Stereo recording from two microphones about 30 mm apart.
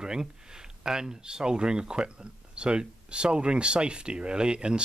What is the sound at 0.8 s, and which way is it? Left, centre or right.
Speech, right.